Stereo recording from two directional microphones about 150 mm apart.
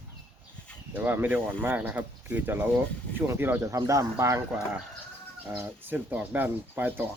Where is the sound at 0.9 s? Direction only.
15° right (ahead or behind).